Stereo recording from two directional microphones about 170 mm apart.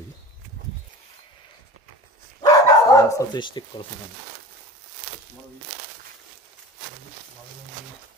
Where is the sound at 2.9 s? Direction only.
20° left (ahead or behind).